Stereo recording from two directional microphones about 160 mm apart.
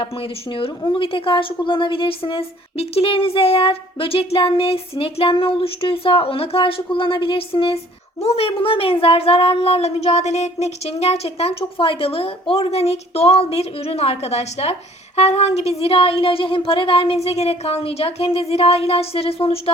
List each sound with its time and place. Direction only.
0.0 s speech: 35° left (ahead or behind)